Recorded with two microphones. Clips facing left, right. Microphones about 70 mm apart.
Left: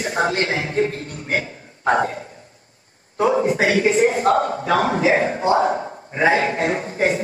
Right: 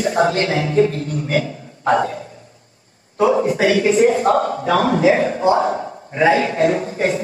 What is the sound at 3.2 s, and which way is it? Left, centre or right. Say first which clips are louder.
Speech: right 2 dB; left.